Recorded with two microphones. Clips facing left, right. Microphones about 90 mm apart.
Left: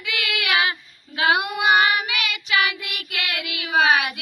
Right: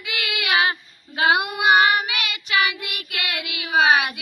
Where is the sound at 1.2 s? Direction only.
5° right (ahead or behind).